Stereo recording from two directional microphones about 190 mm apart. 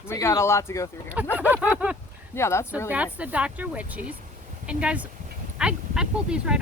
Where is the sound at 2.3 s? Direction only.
15° left (ahead or behind).